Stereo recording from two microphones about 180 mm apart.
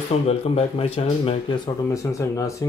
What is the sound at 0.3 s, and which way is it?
A man's voice, 35° left (ahead or behind).